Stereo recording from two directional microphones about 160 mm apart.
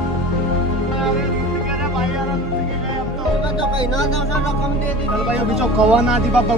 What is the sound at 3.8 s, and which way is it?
Speech, 25° left (ahead or behind).